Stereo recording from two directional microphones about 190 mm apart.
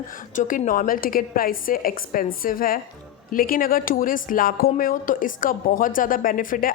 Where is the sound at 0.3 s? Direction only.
45° left (ahead or behind).